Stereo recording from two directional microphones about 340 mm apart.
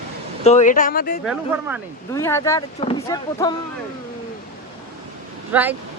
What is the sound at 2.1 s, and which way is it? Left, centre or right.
Speech, centre.